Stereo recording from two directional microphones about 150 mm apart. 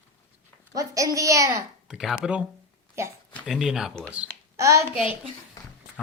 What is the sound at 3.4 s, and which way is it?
Speech, centre (ahead or behind).